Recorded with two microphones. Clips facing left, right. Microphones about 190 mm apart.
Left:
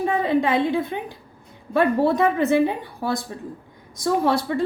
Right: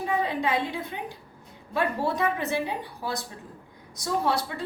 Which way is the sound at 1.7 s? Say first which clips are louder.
Left 8 dB; 50° left (ahead or behind).